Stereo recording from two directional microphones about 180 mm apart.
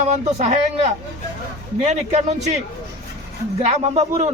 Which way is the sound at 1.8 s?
40° right (ahead or behind).